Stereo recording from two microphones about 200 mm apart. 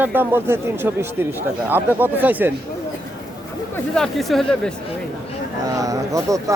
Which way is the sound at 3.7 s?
Centre (ahead or behind).